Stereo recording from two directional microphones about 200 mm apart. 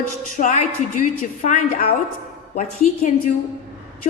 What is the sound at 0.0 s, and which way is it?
A woman's voice, 40° left (ahead or behind).